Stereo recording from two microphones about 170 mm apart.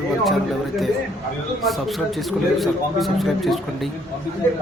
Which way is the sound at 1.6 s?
Centre (ahead or behind).